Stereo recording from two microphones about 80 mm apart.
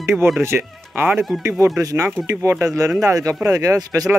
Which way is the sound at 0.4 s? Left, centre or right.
Right.